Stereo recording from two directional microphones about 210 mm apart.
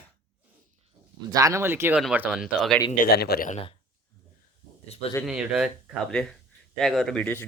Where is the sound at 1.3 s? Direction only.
15° right (ahead or behind); by 2.8 s centre (ahead or behind).